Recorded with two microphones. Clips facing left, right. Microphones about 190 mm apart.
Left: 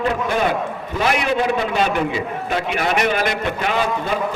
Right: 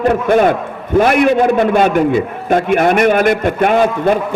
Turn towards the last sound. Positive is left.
turn(degrees=-55)  # may be behind; listen again after turning